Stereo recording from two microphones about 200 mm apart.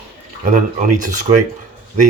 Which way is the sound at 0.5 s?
40° right (ahead or behind).